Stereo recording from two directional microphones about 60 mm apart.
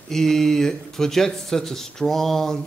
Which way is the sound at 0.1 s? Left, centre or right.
Centre.